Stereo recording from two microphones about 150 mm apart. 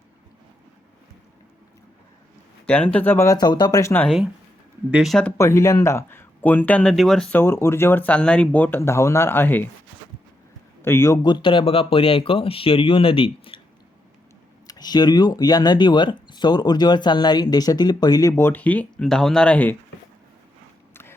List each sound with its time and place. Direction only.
2.6 s speech: 10° left (ahead or behind)
4.9 s speech: 5° right (ahead or behind)
5.4 s speech: 20° left (ahead or behind)
10.8 s speech: 15° left (ahead or behind)
11.2 s speech: 30° left (ahead or behind)
14.7 s speech: 25° left (ahead or behind); by 19.7 s 10° left (ahead or behind)
20.9 s biting: 15° left (ahead or behind)